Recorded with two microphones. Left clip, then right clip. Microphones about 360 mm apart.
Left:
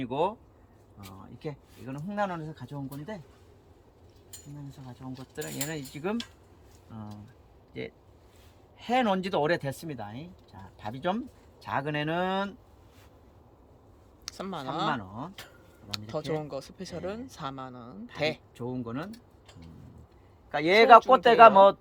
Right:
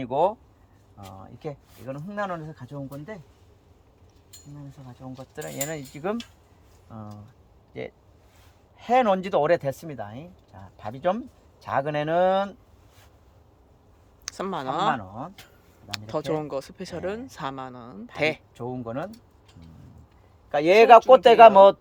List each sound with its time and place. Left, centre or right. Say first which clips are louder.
0.0 s speech: right 6 dB; centre
1.4 s speech: right 3 dB; centre
5.3 s speech: right 4 dB; centre
14.3 s speech: right 7 dB; centre
20.5 s speech: right 4 dB; right